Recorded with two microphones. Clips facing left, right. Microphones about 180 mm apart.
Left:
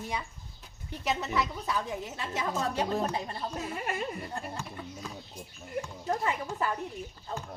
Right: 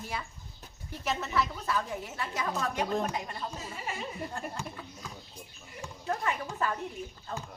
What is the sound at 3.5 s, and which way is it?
Speech, 60° left (ahead or behind).